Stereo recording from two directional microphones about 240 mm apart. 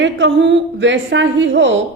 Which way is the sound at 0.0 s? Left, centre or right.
Right.